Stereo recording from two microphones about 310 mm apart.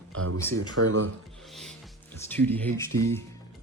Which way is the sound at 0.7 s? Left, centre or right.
Right.